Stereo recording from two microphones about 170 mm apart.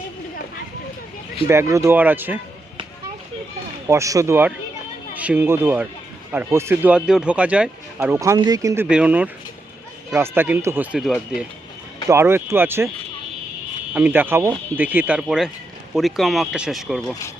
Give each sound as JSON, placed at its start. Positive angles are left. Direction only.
{"t": 1.5, "sound": "speech", "side_deg": -15}
{"t": 3.8, "sound": "speech", "side_deg": -15}
{"t": 10.9, "sound": "speech", "side_deg": 0}
{"t": 12.0, "sound": "speech", "side_deg": -15}
{"t": 13.9, "sound": "speech", "side_deg": -10}